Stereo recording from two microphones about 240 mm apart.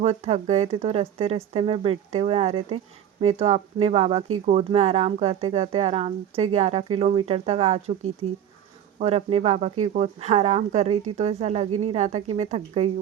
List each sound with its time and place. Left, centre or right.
0.0 s speech: right